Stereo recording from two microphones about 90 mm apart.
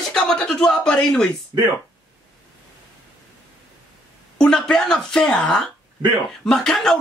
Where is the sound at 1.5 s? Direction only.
45° right (ahead or behind).